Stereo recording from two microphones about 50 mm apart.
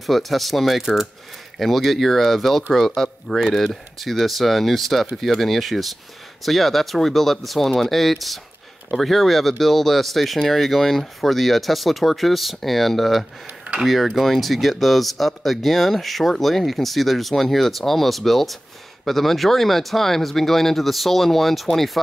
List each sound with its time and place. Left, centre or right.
0.0 s speech: centre